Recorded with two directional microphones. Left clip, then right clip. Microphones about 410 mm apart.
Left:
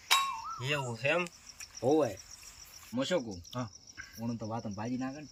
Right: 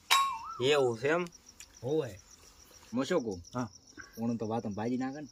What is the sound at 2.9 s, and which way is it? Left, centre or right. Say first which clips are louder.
Speech: right 1 dB; centre.